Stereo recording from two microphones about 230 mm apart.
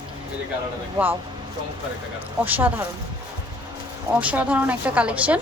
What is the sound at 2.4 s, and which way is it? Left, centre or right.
Speech, centre.